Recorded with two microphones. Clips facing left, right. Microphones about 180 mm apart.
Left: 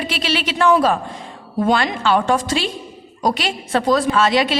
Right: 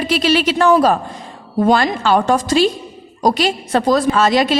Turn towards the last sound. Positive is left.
turn(degrees=-40)  # may be behind; listen again after turning